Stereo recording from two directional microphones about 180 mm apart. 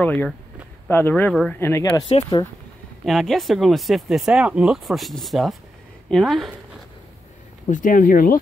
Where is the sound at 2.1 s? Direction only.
30° left (ahead or behind).